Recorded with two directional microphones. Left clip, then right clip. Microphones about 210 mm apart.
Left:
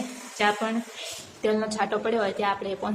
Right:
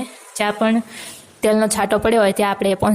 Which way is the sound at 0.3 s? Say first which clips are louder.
Right 6 dB; 50° right (ahead or behind).